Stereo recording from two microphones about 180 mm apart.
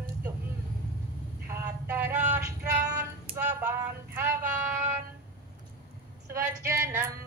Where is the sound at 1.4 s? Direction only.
10° right (ahead or behind).